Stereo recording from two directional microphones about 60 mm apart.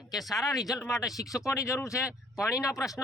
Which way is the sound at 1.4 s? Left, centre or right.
Left.